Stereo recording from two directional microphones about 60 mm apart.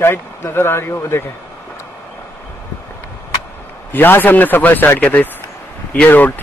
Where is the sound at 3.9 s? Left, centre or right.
Left.